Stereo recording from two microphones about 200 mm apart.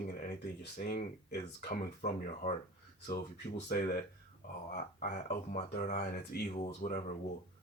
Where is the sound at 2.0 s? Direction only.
40° left (ahead or behind).